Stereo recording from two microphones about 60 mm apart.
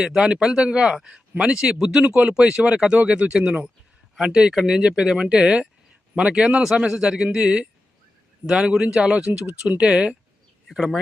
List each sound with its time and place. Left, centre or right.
0.0 s speech: centre
2.0 s speech: right